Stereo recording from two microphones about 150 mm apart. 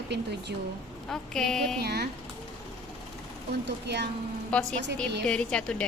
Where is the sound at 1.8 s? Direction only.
90° right.